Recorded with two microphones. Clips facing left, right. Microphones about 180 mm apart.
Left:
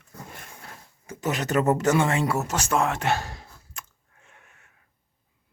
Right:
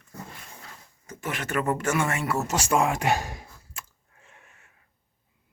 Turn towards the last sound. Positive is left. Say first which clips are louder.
# right 1 dB
turn(degrees=0)  # may be behind; listen again after turning